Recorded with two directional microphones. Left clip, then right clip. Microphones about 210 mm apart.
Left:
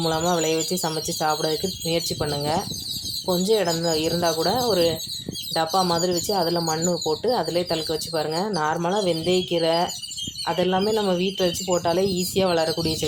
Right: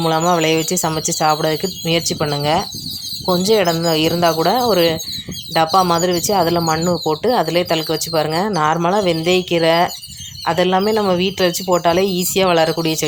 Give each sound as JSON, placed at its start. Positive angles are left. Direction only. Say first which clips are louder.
{"t": 0.0, "sound": "speech", "louder": "right 7 dB", "side_deg": -15}